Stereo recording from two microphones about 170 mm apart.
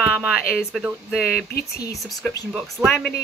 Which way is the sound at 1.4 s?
65° left (ahead or behind).